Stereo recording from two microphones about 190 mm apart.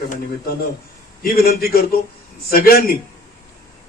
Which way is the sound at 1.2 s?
50° left (ahead or behind).